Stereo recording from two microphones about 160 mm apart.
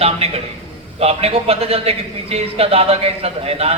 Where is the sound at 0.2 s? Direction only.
40° right (ahead or behind).